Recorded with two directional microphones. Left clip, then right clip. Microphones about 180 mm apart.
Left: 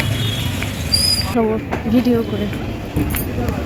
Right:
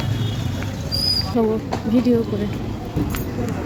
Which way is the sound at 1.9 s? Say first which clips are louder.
Left 2 dB; 15° right (ahead or behind).